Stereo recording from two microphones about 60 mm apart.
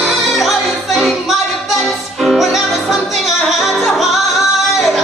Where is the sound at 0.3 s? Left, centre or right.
Centre.